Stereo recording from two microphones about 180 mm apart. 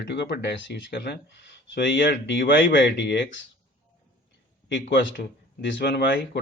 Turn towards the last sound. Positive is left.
turn(degrees=70)  # may be behind; listen again after turning